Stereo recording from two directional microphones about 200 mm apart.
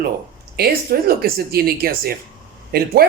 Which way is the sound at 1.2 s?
50° right (ahead or behind).